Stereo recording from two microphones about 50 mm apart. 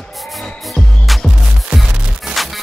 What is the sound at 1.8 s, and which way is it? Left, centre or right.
Music, centre.